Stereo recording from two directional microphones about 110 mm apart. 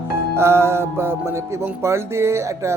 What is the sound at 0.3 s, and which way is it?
Speech, 25° right (ahead or behind).